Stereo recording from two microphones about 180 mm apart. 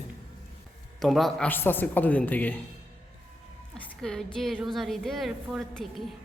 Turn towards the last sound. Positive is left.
turn(degrees=0)  # may be behind; listen again after turning